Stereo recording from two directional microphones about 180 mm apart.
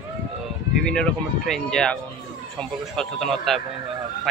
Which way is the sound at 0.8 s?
5° left (ahead or behind).